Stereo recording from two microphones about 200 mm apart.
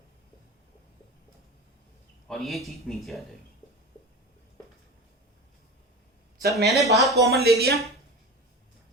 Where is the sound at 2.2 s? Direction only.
Centre (ahead or behind).